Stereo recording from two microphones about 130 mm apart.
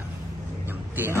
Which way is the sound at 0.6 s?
15° right (ahead or behind).